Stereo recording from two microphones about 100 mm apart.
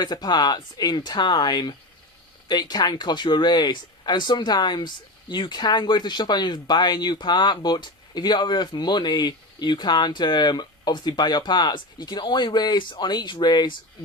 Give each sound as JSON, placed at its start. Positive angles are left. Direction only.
{"t": 0.0, "sound": "speech", "side_deg": 45}